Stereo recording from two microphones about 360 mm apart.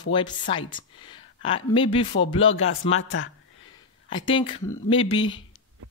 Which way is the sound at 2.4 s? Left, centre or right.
Left.